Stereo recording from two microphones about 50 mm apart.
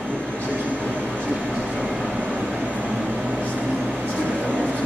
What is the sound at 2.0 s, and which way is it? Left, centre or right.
Vehicle, right.